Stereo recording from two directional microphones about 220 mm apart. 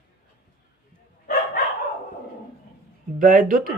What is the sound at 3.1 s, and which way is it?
Speech, 40° right (ahead or behind).